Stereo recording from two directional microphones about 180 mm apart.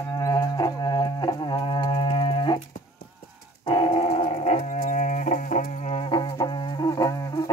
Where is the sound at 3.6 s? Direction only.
30° left (ahead or behind).